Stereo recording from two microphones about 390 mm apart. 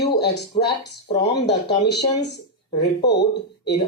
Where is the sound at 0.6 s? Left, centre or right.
Left.